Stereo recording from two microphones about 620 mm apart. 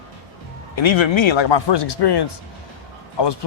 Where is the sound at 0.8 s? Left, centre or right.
Left.